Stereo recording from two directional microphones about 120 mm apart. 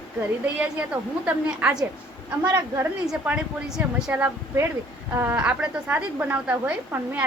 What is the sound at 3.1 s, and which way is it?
A woman's voice, 5° right (ahead or behind).